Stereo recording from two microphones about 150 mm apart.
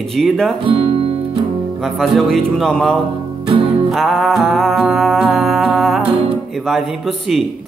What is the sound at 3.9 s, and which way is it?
Music, centre (ahead or behind).